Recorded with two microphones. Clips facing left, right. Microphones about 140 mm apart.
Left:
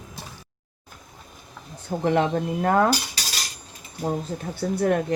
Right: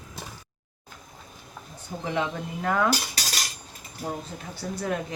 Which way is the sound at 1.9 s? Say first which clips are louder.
Left 7 dB; 50° left (ahead or behind).